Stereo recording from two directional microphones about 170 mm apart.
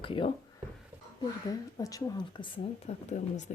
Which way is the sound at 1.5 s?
20° left (ahead or behind).